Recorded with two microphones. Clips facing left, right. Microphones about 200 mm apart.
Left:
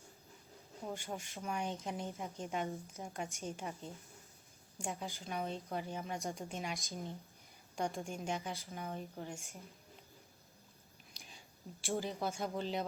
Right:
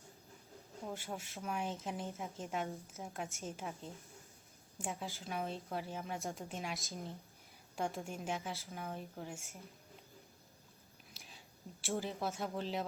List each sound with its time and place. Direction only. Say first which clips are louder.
0.9 s a woman's voice: left 1 dB; 5° right (ahead or behind)
11.1 s speech: even; centre (ahead or behind)